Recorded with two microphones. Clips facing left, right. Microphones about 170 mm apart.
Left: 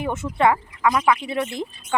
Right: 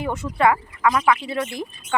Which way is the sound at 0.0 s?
25° left (ahead or behind).